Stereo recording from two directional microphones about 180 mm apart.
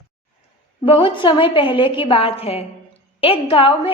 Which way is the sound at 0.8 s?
30° left (ahead or behind).